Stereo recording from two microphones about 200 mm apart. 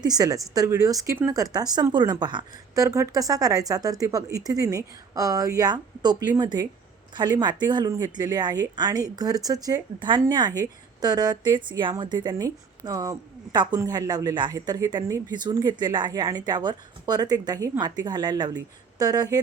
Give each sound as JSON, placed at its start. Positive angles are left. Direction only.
{"t": 0.0, "sound": "speech", "side_deg": -20}